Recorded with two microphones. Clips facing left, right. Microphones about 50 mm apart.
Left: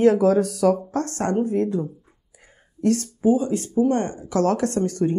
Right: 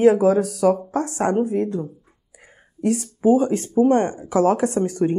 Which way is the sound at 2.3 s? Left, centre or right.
Centre.